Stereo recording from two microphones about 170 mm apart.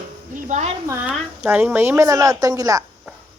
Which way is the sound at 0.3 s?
45° right (ahead or behind).